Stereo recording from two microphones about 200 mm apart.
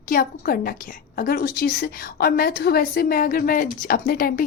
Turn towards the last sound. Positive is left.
turn(degrees=45)  # may be behind; listen again after turning